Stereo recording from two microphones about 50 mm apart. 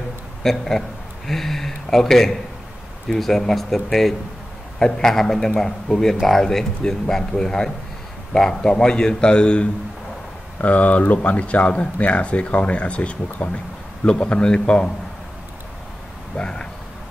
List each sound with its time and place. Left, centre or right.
0.4 s speech: centre
10.6 s speech: left
16.3 s speech: centre